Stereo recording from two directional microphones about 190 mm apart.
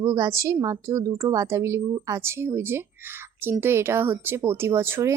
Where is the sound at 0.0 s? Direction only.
15° right (ahead or behind).